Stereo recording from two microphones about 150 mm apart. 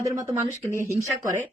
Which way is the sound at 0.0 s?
20° right (ahead or behind).